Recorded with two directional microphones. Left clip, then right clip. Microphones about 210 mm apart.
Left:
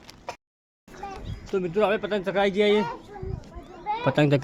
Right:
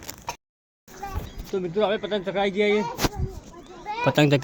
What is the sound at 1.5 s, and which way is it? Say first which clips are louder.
Speech: left 1 dB; 5° right (ahead or behind).